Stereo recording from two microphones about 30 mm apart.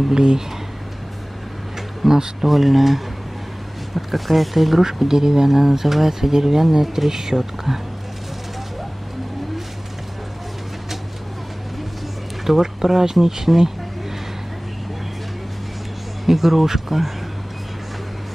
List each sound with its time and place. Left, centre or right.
0.1 s speech: right
2.0 s speech: centre
4.8 s speech: centre
12.4 s speech: centre
16.3 s speech: centre